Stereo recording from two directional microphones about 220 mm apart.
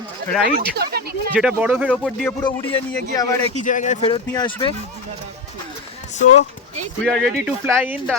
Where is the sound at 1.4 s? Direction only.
5° right (ahead or behind).